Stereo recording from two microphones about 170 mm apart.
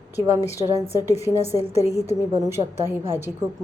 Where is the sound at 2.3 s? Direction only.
15° right (ahead or behind).